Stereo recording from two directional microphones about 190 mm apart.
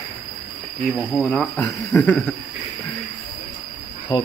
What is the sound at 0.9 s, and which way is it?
Speech, centre (ahead or behind).